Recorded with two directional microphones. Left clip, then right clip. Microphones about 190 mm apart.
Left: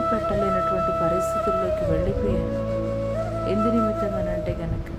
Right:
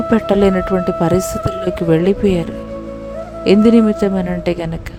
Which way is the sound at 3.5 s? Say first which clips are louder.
Right 12 dB; 55° right (ahead or behind).